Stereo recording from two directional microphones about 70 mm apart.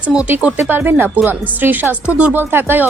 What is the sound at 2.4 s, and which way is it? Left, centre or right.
Speech, right.